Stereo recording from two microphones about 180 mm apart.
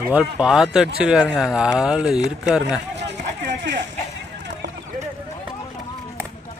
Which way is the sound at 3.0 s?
75° right (ahead or behind).